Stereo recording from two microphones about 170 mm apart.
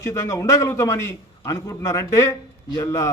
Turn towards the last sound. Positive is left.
turn(degrees=20)  # may be behind; listen again after turning